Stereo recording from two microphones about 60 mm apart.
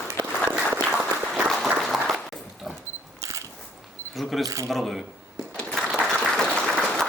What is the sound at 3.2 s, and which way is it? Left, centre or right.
Biting, right.